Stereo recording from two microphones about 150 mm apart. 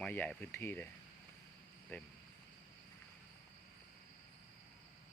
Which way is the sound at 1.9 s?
10° left (ahead or behind).